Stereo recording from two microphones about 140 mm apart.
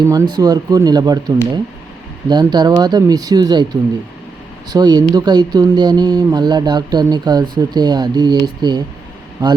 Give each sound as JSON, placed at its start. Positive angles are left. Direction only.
{"t": 0.1, "sound": "speech", "side_deg": -25}